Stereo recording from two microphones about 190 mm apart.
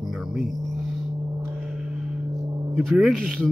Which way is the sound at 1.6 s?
5° right (ahead or behind).